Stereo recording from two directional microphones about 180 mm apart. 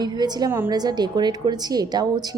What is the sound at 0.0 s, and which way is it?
A woman's voice, 25° right (ahead or behind).